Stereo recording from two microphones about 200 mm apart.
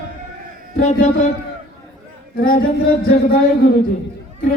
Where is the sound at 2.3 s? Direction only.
45° left (ahead or behind).